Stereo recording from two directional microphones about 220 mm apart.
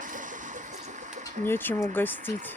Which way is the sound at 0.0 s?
35° right (ahead or behind).